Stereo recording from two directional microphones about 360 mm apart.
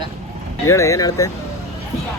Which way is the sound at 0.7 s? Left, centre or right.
Centre.